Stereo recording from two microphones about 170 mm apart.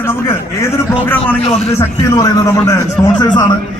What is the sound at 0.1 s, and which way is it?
A man's voice, 15° left (ahead or behind).